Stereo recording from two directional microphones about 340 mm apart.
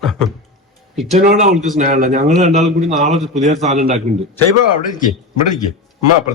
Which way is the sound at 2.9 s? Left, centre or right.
Centre.